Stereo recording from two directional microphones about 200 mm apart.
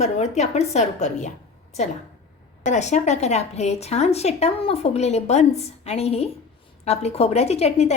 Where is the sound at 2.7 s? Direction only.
35° left (ahead or behind).